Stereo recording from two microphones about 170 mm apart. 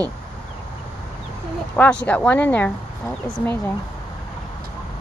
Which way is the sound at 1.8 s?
5° left (ahead or behind).